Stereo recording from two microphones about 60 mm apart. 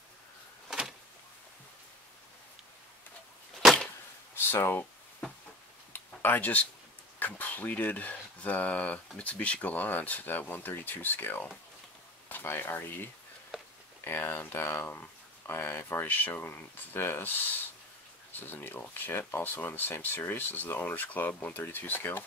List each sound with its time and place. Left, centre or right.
0.7 s power windows: centre
4.4 s speech: left
5.9 s a sound: left
7.2 s speech: left